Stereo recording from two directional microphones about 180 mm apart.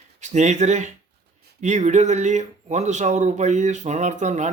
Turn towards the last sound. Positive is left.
turn(degrees=-40)  # may be behind; listen again after turning